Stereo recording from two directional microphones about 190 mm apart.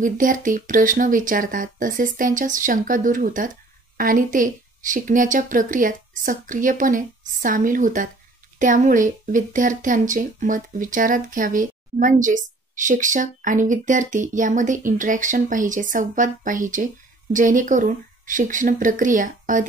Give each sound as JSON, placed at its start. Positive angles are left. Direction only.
{"t": 0.0, "sound": "speech", "side_deg": -45}